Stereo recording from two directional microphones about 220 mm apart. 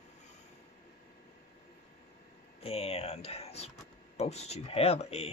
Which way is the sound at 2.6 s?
30° left (ahead or behind).